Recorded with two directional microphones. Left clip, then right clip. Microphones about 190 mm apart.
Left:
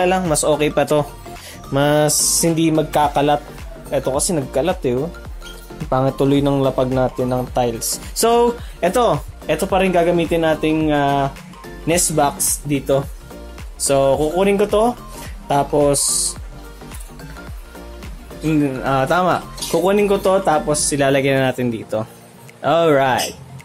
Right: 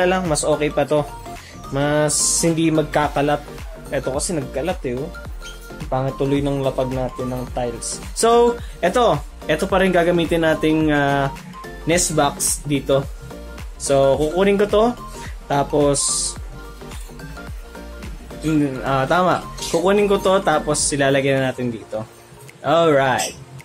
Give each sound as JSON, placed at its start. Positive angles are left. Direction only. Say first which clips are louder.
{"t": 0.3, "sound": "speech", "louder": "left 2 dB", "side_deg": 25}
{"t": 2.5, "sound": "speech", "louder": "left 2 dB", "side_deg": 10}
{"t": 9.1, "sound": "speech", "louder": "left 1 dB", "side_deg": 5}
{"t": 11.9, "sound": "speech", "louder": "left 1 dB", "side_deg": 15}
{"t": 18.4, "sound": "speech", "louder": "left 2 dB", "side_deg": 20}